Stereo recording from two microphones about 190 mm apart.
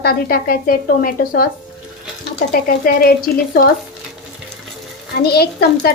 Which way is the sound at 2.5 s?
50° left (ahead or behind).